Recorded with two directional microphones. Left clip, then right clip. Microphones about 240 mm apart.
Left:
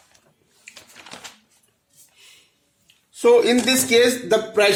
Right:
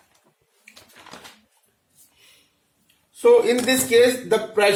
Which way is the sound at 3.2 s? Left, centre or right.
Left.